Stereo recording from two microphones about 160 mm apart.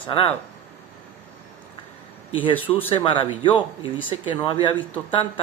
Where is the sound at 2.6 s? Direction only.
10° left (ahead or behind).